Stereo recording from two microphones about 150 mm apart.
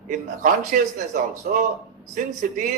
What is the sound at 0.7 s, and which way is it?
Speech, 65° right (ahead or behind).